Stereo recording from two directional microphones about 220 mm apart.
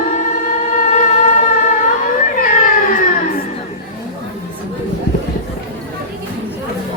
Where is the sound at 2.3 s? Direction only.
40° left (ahead or behind).